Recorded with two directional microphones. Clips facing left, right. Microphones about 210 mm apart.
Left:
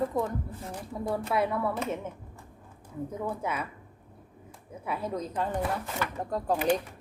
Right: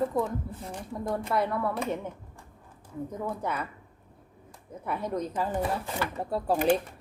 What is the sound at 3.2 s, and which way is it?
Speech, 5° left (ahead or behind).